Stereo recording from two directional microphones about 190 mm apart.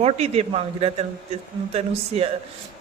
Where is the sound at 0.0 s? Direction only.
35° right (ahead or behind).